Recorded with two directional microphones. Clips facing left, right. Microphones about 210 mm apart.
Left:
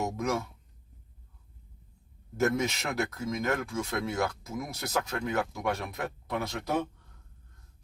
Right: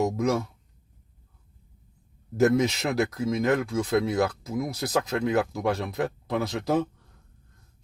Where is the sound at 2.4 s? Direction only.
35° right (ahead or behind).